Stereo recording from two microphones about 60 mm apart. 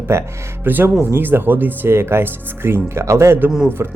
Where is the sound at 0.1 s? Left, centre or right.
Right.